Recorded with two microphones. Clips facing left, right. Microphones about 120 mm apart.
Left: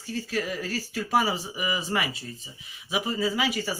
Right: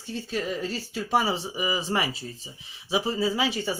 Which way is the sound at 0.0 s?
25° right (ahead or behind).